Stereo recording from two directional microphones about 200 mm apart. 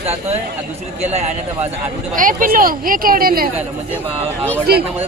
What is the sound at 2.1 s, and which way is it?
Speech, 40° right (ahead or behind).